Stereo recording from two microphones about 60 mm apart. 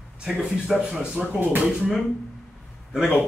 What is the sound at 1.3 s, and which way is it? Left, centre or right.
Speech, right.